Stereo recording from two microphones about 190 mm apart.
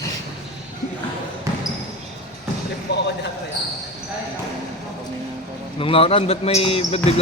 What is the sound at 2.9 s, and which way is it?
Speech, 60° left (ahead or behind).